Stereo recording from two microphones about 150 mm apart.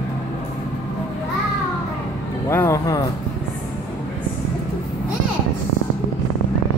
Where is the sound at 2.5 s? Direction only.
15° left (ahead or behind).